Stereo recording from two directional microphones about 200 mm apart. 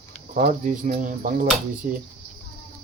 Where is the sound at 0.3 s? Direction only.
40° right (ahead or behind).